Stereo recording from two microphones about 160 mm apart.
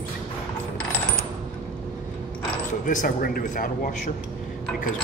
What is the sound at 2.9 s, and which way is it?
A man's voice, 60° left (ahead or behind).